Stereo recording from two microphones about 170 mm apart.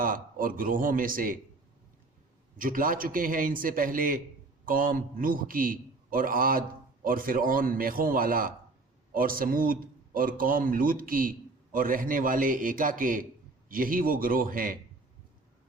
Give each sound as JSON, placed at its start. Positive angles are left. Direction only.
{"t": 0.0, "sound": "a man's voice", "side_deg": -55}
{"t": 2.6, "sound": "a man's voice", "side_deg": -55}